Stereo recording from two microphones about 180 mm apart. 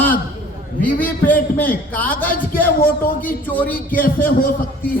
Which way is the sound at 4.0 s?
50° left (ahead or behind).